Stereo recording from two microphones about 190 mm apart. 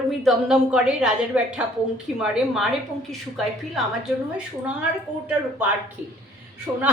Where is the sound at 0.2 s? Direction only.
Centre (ahead or behind).